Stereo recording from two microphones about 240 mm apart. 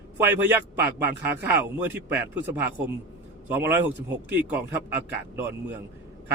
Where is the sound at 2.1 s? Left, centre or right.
Centre.